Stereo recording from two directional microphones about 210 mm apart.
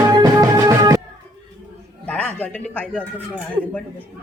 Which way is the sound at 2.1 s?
5° left (ahead or behind).